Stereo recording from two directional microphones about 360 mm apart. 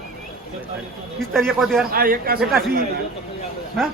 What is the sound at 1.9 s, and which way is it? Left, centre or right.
Speech, right.